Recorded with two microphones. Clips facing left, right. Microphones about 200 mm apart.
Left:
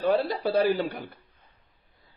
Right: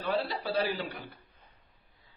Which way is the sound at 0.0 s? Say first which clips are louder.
Left 7 dB; 45° left (ahead or behind).